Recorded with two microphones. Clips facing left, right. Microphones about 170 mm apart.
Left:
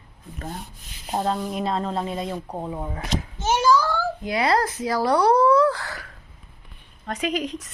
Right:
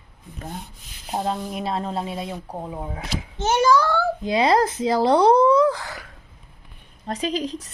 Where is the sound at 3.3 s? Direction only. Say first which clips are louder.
Right 2 dB; 65° right (ahead or behind).